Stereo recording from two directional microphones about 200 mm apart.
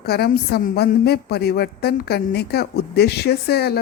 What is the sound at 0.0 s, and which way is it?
A woman's voice, 50° left (ahead or behind).